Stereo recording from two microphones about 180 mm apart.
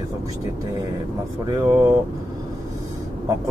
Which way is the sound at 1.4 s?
20° right (ahead or behind).